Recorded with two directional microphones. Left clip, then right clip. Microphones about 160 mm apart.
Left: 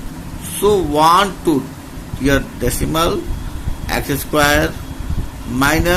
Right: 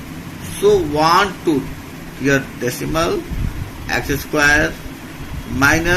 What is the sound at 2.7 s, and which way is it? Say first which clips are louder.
A man's voice: left 2 dB; 90° left.